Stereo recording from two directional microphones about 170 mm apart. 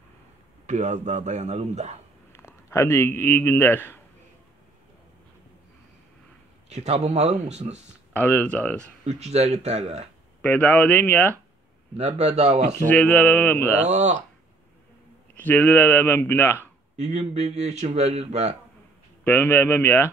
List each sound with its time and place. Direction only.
0.7 s a man's voice: 45° right (ahead or behind)
2.3 s a man's voice: 15° left (ahead or behind)
6.7 s speech: 40° right (ahead or behind)
8.1 s a man's voice: 10° left (ahead or behind)
9.0 s speech: 40° right (ahead or behind)
10.4 s a man's voice: 10° left (ahead or behind)
12.0 s speech: 40° right (ahead or behind)
12.8 s a man's voice: 10° left (ahead or behind)
13.8 s speech: 40° right (ahead or behind)
15.3 s a man's voice: 10° left (ahead or behind)
16.9 s speech: 45° right (ahead or behind)
19.2 s a man's voice: 10° left (ahead or behind)